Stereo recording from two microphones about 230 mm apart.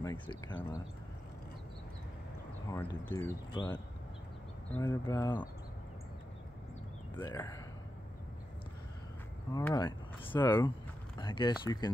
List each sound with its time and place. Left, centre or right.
0.0 s speech: centre
2.7 s speech: centre
7.2 s speech: centre
9.5 s speech: centre